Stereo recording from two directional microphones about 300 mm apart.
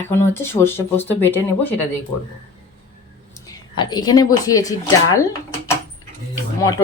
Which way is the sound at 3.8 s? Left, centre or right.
Centre.